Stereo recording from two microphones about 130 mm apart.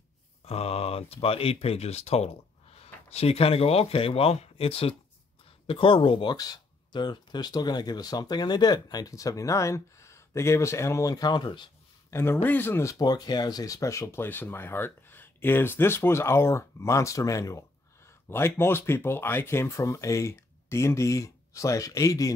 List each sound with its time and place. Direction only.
0.5 s speech: 50° left (ahead or behind)
6.3 s speech: 30° left (ahead or behind)
12.1 s speech: 20° left (ahead or behind)
13.0 s speech: 30° left (ahead or behind)